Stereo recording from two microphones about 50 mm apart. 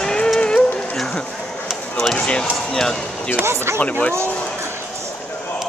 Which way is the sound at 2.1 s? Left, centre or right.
Left.